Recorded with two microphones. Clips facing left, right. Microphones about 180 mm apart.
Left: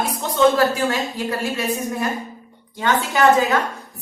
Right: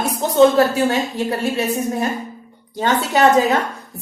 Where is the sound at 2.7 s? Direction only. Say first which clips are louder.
Right 2 dB; 40° right (ahead or behind).